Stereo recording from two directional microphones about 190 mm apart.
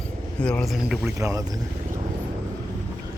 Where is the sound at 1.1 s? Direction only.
15° right (ahead or behind).